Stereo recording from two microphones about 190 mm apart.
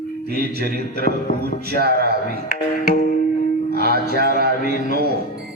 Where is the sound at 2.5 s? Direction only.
50° left (ahead or behind).